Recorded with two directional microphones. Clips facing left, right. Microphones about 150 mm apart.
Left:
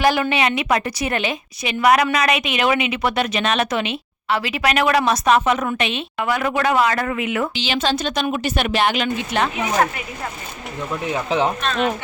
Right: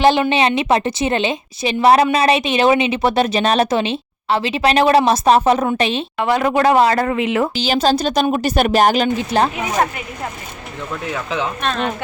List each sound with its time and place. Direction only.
0.0 s a woman's voice: 25° right (ahead or behind)
7.5 s a woman's voice: 40° right (ahead or behind)
11.1 s speech: 35° left (ahead or behind)